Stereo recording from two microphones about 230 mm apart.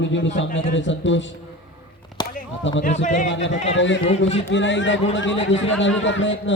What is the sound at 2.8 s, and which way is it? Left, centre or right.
Speech, left.